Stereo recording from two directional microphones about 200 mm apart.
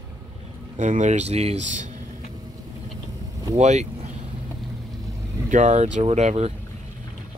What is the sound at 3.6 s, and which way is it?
Speech, 35° right (ahead or behind).